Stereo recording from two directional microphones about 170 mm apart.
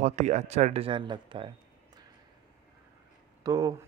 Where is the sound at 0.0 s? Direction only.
40° right (ahead or behind).